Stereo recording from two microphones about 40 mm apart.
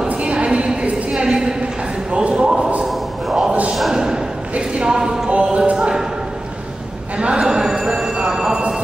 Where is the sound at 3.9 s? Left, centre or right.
Centre.